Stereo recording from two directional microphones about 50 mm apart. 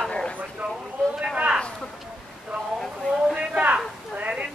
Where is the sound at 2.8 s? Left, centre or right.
Centre.